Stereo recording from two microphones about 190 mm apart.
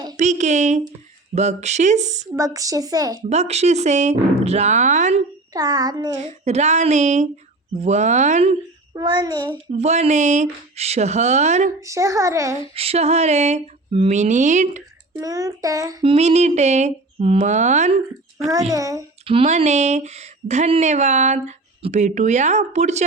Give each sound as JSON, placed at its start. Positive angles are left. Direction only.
{"t": 0.2, "sound": "speech", "side_deg": -40}
{"t": 2.3, "sound": "a woman's voice", "side_deg": -15}
{"t": 3.2, "sound": "speech", "side_deg": -35}
{"t": 5.5, "sound": "a woman's voice", "side_deg": -20}
{"t": 6.1, "sound": "speech", "side_deg": -35}
{"t": 9.0, "sound": "a woman's voice", "side_deg": -20}
{"t": 9.7, "sound": "speech", "side_deg": -35}
{"t": 11.8, "sound": "a child's voice", "side_deg": -15}
{"t": 12.7, "sound": "speech", "side_deg": -30}
{"t": 15.2, "sound": "a child's voice", "side_deg": -15}
{"t": 16.1, "sound": "speech", "side_deg": -35}
{"t": 18.7, "sound": "a child's voice", "side_deg": -15}
{"t": 19.2, "sound": "speech", "side_deg": -30}